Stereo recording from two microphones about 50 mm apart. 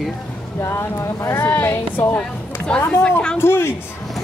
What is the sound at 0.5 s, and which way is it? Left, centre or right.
Speech, left.